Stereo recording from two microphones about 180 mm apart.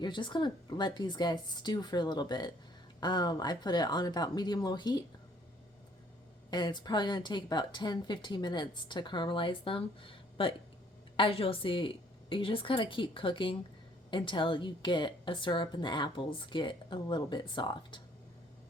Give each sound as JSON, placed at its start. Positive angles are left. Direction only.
{"t": 0.0, "sound": "a woman's voice", "side_deg": 25}
{"t": 6.5, "sound": "a woman's voice", "side_deg": 25}